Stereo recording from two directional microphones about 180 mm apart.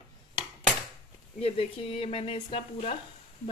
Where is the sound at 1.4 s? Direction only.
35° left (ahead or behind).